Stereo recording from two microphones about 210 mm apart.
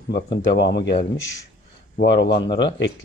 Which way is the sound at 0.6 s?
20° left (ahead or behind).